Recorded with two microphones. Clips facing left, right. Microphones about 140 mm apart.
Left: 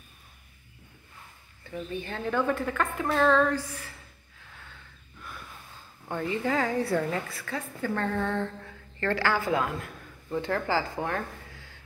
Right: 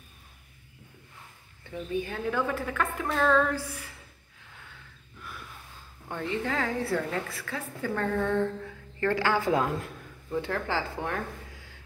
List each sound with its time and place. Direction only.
2.0 s a woman's voice: 10° right (ahead or behind)
3.5 s a woman's voice: 10° right (ahead or behind)
6.0 s a woman's voice: 5° left (ahead or behind); by 9.6 s 20° right (ahead or behind)
10.3 s a woman's voice: centre (ahead or behind)